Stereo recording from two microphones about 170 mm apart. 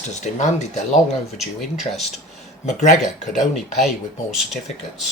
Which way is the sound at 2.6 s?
45° left (ahead or behind).